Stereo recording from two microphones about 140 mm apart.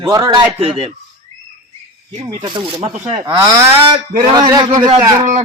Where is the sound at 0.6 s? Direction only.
45° right (ahead or behind).